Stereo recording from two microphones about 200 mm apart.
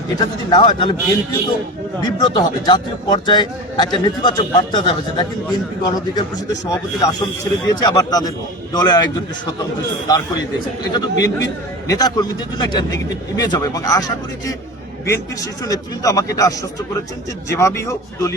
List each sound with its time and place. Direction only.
0.2 s a man's voice: 25° left (ahead or behind)
2.0 s a man's voice: 20° left (ahead or behind)
10.9 s a man's voice: 20° left (ahead or behind)
15.0 s a man's voice: 15° left (ahead or behind)